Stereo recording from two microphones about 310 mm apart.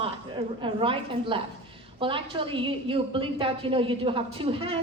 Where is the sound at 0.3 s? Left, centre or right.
Centre.